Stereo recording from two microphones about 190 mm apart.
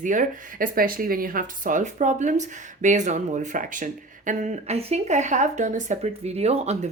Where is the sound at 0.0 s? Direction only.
45° right (ahead or behind).